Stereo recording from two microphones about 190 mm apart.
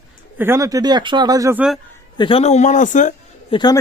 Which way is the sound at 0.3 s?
15° right (ahead or behind).